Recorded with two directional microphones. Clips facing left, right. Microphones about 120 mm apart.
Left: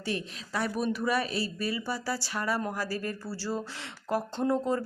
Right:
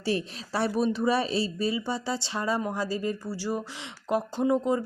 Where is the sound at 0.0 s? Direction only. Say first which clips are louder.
Right 5 dB; 30° right (ahead or behind).